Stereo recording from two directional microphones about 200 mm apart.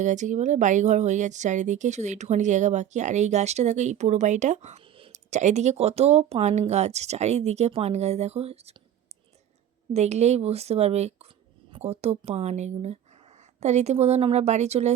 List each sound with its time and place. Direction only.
0.0 s speech: 40° right (ahead or behind)
9.9 s speech: 35° right (ahead or behind)